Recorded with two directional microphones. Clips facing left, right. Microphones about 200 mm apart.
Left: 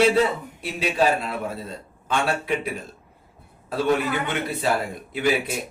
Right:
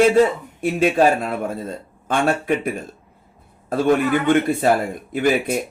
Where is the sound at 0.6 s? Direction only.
50° right (ahead or behind).